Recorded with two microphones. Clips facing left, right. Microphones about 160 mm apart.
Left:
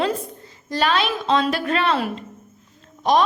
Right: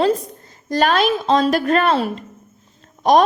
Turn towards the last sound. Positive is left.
turn(degrees=-45)  # may be behind; listen again after turning